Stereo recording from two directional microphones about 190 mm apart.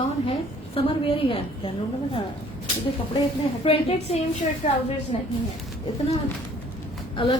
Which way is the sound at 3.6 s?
30° left (ahead or behind).